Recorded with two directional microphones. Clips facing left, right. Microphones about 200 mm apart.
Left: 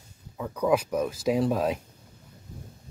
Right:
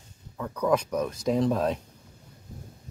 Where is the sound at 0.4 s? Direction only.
10° left (ahead or behind).